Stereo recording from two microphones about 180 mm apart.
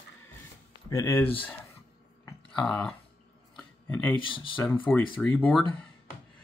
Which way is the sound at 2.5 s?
5° left (ahead or behind).